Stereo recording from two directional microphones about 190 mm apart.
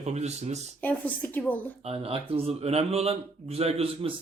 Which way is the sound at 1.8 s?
30° right (ahead or behind).